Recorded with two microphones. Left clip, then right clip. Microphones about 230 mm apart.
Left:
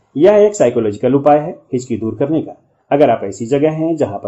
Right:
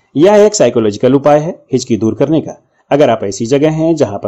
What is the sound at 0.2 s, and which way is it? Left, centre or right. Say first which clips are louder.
Speech: right 2 dB; right.